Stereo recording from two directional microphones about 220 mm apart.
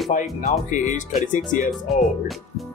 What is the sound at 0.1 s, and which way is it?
Speech, 35° left (ahead or behind).